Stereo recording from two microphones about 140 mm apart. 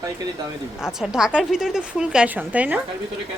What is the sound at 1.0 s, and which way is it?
A woman's voice, 5° right (ahead or behind).